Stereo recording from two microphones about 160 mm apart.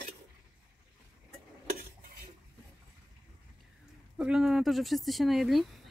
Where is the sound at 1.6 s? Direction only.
60° right (ahead or behind).